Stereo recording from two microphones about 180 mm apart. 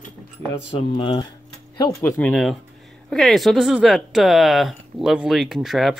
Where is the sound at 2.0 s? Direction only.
5° left (ahead or behind).